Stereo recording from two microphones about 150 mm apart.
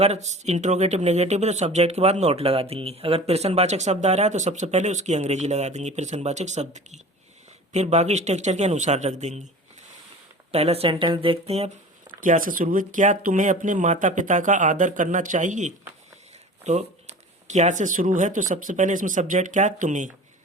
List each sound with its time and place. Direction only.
0.0 s speech: 50° right (ahead or behind)
10.5 s speech: 40° right (ahead or behind)
12.2 s speech: 60° right (ahead or behind)